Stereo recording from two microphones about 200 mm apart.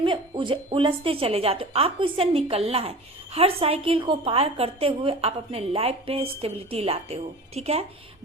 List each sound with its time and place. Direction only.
0.0 s a woman's voice: 25° right (ahead or behind)